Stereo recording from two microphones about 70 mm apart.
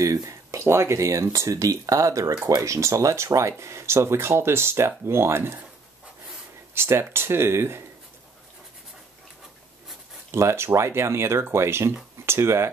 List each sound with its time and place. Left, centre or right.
0.0 s speech: right
6.7 s speech: right
10.3 s speech: right